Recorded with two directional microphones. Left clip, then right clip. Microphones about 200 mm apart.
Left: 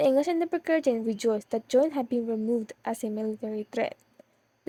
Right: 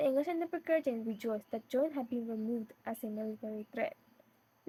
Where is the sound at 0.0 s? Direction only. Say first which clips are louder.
Left 9 dB; 45° left (ahead or behind).